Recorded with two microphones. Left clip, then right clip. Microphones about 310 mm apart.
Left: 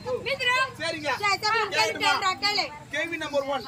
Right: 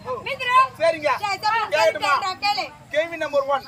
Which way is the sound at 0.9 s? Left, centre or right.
Centre.